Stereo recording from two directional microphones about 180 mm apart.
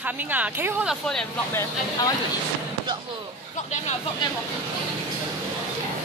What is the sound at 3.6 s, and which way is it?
Speech, 40° left (ahead or behind).